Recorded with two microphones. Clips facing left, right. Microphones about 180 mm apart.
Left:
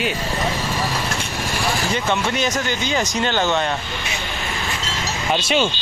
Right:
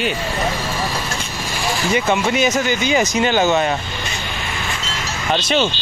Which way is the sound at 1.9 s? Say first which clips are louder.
Right 8 dB; 10° right (ahead or behind).